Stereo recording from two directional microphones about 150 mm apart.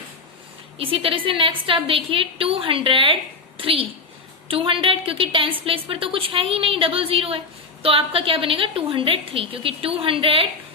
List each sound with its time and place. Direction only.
0.8 s a woman's voice: 40° right (ahead or behind)